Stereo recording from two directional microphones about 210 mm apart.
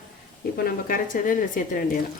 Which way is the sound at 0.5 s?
40° left (ahead or behind).